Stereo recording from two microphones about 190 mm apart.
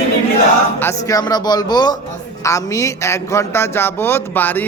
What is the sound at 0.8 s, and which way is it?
A man's voice, 15° left (ahead or behind).